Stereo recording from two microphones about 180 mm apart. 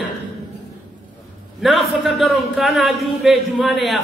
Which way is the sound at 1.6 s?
Centre (ahead or behind).